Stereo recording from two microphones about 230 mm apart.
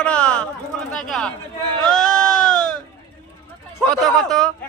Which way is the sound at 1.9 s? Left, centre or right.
Centre.